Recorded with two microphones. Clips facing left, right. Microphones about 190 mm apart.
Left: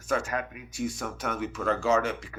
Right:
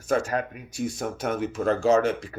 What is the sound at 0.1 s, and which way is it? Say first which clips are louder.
Speech: right 4 dB; 35° right (ahead or behind).